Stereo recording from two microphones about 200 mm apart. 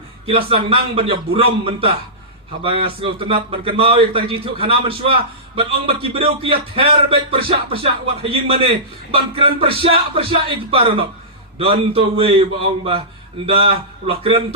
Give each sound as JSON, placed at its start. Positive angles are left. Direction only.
{"t": 0.3, "sound": "a man's voice", "side_deg": -25}